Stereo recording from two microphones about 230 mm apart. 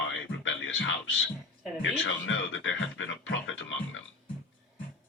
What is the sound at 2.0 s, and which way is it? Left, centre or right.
Speech, left.